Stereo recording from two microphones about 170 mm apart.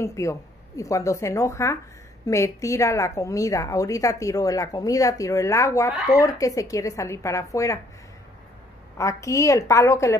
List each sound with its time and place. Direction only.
0.0 s a woman's voice: 20° left (ahead or behind)
8.9 s a woman's voice: 20° left (ahead or behind)